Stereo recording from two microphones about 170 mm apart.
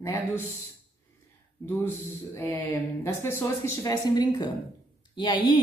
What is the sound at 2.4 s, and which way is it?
Speech, 10° left (ahead or behind).